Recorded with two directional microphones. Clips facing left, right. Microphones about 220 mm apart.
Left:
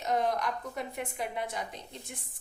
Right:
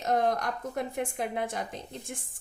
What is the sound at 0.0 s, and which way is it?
A woman's voice, 50° right (ahead or behind).